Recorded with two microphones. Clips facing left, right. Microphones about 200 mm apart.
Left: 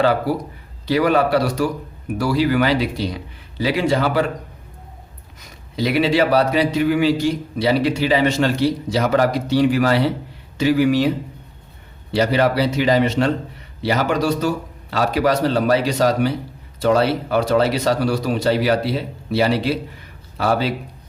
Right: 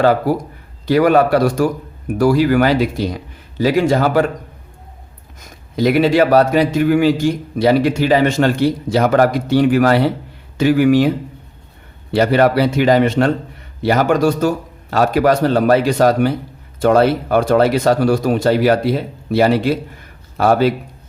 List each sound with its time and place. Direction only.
0.0 s a man's voice: 45° right (ahead or behind)
5.4 s a man's voice: 45° right (ahead or behind)
12.1 s a man's voice: 55° right (ahead or behind)